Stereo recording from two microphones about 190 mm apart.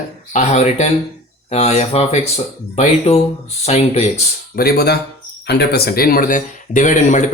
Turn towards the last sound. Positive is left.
turn(degrees=40)  # may be behind; listen again after turning